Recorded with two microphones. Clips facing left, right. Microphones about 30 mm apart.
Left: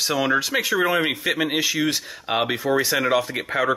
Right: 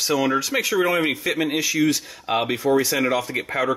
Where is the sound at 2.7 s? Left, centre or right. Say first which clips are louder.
Right 2 dB; left.